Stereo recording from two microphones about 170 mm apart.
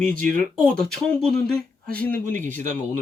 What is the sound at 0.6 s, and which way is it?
Speech, 5° left (ahead or behind).